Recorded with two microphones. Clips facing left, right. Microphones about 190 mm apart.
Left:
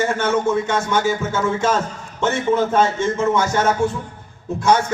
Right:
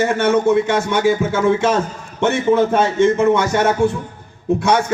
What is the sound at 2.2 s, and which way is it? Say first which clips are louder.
Speech: right 4 dB; 65° right (ahead or behind).